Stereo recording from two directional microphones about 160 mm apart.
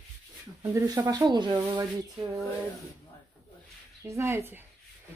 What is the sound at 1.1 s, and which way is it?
Speech, 25° right (ahead or behind).